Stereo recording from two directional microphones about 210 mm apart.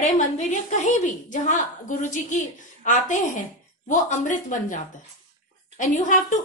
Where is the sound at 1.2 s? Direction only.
35° left (ahead or behind).